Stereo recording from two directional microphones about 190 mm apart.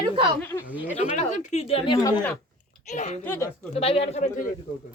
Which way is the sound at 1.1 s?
35° left (ahead or behind).